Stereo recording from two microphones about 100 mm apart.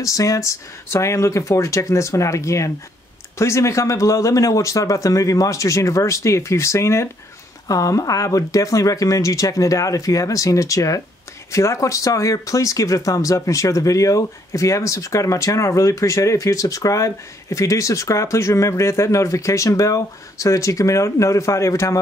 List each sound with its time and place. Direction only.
0.0 s speech: 35° left (ahead or behind)